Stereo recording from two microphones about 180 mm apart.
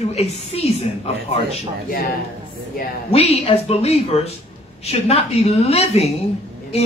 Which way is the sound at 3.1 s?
35° left (ahead or behind).